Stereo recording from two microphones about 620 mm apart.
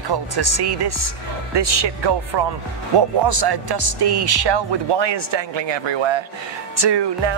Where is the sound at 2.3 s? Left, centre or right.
Right.